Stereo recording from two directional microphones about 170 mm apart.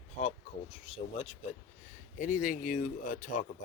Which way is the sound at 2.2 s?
50° left (ahead or behind).